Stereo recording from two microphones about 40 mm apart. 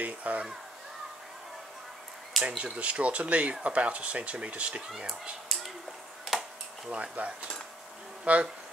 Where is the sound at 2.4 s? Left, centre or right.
Right.